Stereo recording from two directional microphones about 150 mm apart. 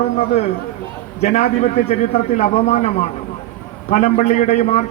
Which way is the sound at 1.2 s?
50° left (ahead or behind).